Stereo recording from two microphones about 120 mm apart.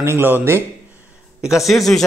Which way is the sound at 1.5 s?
Centre (ahead or behind).